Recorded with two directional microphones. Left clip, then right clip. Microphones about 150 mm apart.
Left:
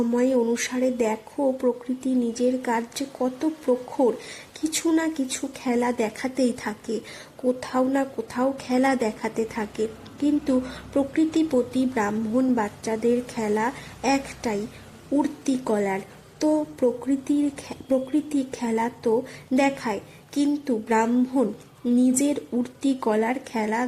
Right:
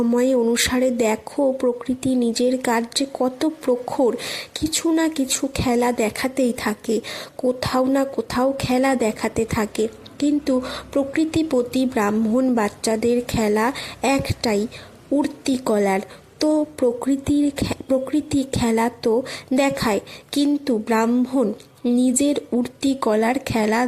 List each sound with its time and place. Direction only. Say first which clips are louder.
0.1 s a woman's voice: right 4 dB; 30° right (ahead or behind)